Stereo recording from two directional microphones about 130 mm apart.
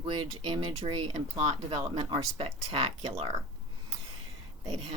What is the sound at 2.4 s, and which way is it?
Speech, 50° right (ahead or behind).